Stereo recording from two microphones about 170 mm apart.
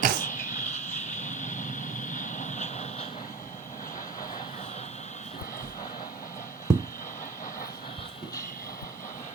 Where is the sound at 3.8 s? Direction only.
50° left (ahead or behind).